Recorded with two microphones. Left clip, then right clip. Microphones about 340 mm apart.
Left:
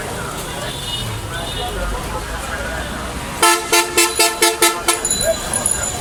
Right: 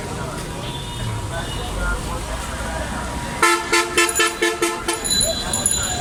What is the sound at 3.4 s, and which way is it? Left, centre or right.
Vehicle, centre.